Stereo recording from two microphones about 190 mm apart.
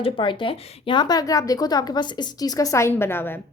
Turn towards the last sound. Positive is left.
turn(degrees=10)  # may be behind; listen again after turning